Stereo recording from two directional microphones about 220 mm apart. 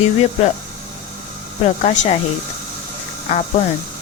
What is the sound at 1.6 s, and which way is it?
Speech, 30° left (ahead or behind).